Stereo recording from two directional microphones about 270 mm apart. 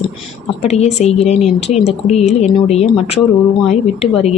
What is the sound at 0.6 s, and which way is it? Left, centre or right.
A woman's voice, left.